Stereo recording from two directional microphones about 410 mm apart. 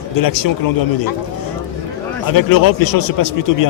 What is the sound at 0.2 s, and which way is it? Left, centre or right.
Speech, left.